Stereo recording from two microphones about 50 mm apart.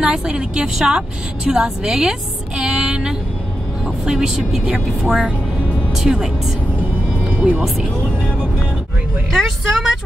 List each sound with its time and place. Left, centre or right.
0.0 s a woman's voice: centre
4.6 s speech: right
6.0 s speech: centre
6.8 s music: right
9.4 s speech: centre